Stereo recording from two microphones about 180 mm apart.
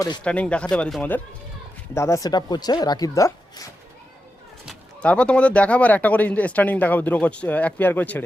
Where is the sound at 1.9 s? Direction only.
15° left (ahead or behind).